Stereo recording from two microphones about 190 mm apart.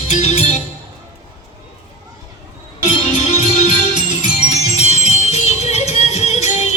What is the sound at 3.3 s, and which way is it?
Music, 40° left (ahead or behind).